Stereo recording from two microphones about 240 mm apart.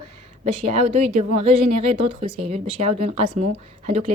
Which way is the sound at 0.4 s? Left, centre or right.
Right.